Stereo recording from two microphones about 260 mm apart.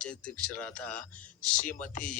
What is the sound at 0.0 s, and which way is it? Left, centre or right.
Speech, centre.